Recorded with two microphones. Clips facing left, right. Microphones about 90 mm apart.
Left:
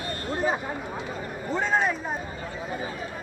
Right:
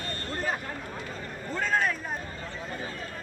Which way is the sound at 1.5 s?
20° left (ahead or behind).